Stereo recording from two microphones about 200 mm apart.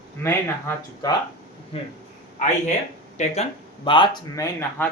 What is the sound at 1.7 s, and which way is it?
Speech, 30° left (ahead or behind).